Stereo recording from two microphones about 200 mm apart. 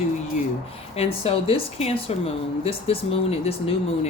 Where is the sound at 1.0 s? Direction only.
30° left (ahead or behind).